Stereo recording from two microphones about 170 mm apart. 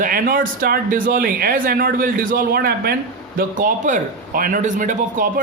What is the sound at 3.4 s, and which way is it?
Speech, 50° right (ahead or behind).